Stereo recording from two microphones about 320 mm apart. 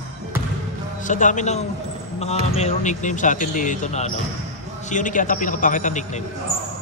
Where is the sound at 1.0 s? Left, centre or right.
Left.